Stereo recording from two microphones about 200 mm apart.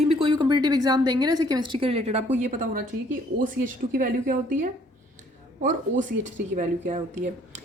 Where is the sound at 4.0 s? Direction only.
40° right (ahead or behind).